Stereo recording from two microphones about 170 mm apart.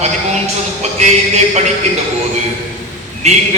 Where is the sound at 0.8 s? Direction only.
40° right (ahead or behind).